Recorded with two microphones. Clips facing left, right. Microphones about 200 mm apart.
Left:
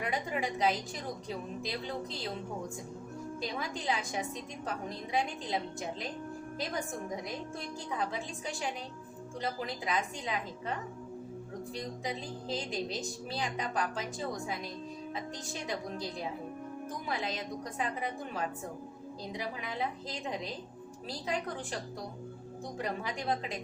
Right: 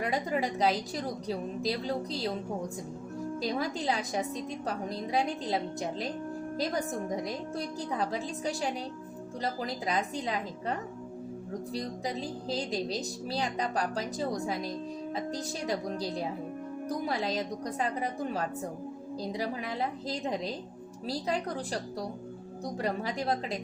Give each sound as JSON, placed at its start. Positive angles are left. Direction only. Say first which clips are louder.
{"t": 0.0, "sound": "a woman's voice", "louder": "right 4 dB", "side_deg": -35}
{"t": 3.4, "sound": "a woman's voice", "louder": "right 4 dB", "side_deg": -40}
{"t": 7.3, "sound": "a woman's voice", "louder": "right 5 dB", "side_deg": -40}